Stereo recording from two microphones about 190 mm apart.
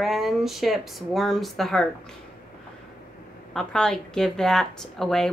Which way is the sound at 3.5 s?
5° left (ahead or behind).